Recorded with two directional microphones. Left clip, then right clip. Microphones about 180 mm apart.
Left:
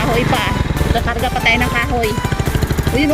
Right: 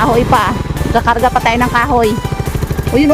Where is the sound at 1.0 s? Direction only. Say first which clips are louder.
Right 5 dB; 30° right (ahead or behind).